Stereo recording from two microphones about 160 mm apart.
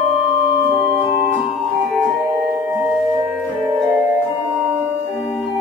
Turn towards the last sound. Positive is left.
turn(degrees=-10)  # may be behind; listen again after turning